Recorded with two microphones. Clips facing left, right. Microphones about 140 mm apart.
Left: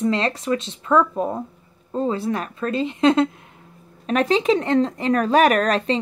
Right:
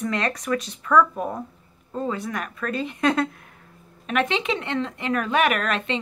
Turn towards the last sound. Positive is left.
turn(degrees=35)  # may be behind; listen again after turning